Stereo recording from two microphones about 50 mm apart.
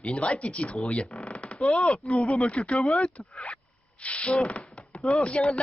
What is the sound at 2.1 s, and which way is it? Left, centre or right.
Speech, centre.